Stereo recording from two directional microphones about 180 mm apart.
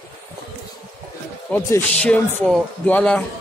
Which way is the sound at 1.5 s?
5° left (ahead or behind).